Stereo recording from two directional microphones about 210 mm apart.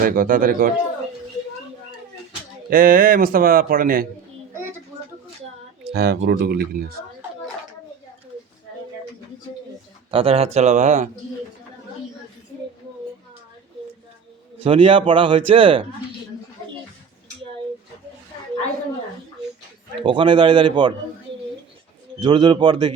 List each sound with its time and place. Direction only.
0.0 s a man's voice: 40° right (ahead or behind)
2.6 s a man's voice: 40° right (ahead or behind)
5.8 s a man's voice: 50° right (ahead or behind)
10.1 s speech: 25° right (ahead or behind)
14.6 s speech: 25° right (ahead or behind)
20.0 s speech: 25° right (ahead or behind)
22.2 s speech: 20° right (ahead or behind)